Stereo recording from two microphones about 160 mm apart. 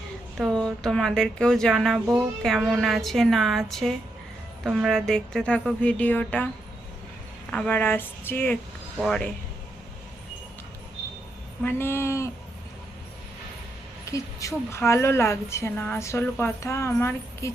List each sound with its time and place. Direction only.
0.3 s speech: centre (ahead or behind)
7.5 s a woman's voice: 5° left (ahead or behind)
11.6 s speech: 15° left (ahead or behind)
14.0 s a woman's voice: 20° left (ahead or behind)